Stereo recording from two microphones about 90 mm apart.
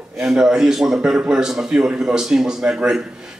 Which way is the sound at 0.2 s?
5° right (ahead or behind).